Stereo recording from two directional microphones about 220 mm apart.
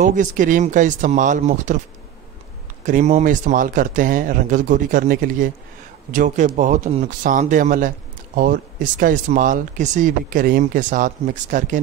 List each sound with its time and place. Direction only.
0.0 s speech: 35° right (ahead or behind)
2.8 s speech: 30° right (ahead or behind)